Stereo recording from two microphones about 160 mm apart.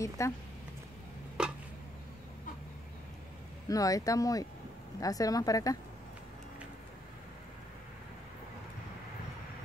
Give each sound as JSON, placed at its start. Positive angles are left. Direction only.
{"t": 0.2, "sound": "speech", "side_deg": 20}
{"t": 1.4, "sound": "a sound", "side_deg": -5}
{"t": 3.6, "sound": "speech", "side_deg": 20}